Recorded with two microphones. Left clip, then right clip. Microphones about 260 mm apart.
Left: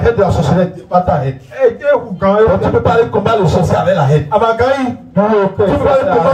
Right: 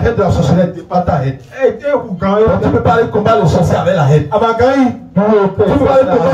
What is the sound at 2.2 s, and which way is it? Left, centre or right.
Speech, centre.